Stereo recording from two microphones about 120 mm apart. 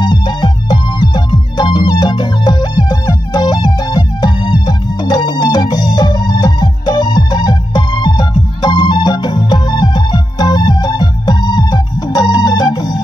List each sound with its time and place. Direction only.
0.0 s music: 40° left (ahead or behind)